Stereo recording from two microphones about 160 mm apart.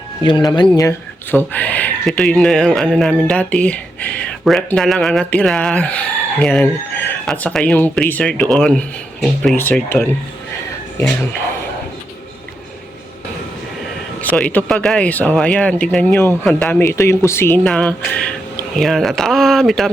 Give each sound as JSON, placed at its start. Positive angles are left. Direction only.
{"t": 0.2, "sound": "speech", "side_deg": 25}
{"t": 0.9, "sound": "speech", "side_deg": 10}
{"t": 14.2, "sound": "speech", "side_deg": 10}
{"t": 16.8, "sound": "speech", "side_deg": 15}